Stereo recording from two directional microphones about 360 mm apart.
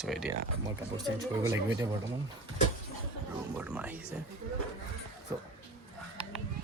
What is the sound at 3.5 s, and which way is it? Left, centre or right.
Speech, centre.